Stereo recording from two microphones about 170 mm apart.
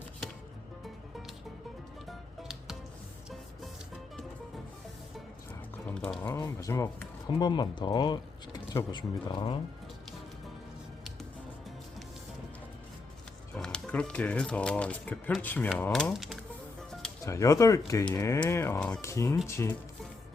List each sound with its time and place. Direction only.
2.0 s music: 5° right (ahead or behind)
5.9 s speech: 5° left (ahead or behind)
6.3 s speech: 20° left (ahead or behind)
13.6 s speech: 5° left (ahead or behind)
17.2 s speech: 20° left (ahead or behind)
18.8 s speech: 5° left (ahead or behind)
19.0 s speech: 15° left (ahead or behind)